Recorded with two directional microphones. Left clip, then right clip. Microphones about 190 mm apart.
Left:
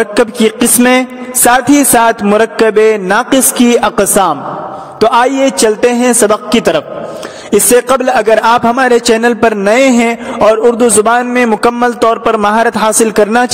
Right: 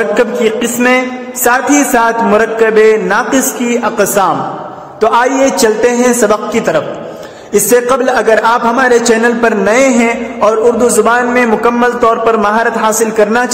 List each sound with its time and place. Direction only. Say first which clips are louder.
0.1 s speech: even; 60° left (ahead or behind)